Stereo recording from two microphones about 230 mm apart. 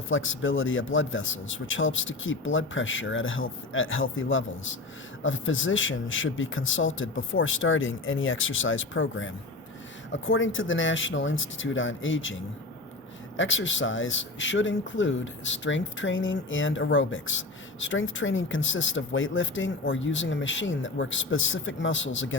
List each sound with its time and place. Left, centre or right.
0.1 s speech: left